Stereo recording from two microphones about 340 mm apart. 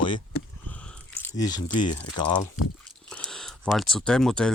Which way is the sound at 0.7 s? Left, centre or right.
Centre.